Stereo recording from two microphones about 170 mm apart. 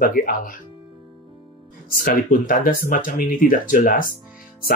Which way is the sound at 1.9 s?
55° left (ahead or behind).